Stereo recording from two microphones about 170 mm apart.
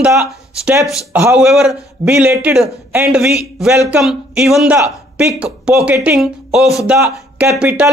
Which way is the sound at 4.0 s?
Centre (ahead or behind).